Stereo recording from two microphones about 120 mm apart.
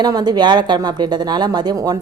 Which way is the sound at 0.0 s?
35° right (ahead or behind).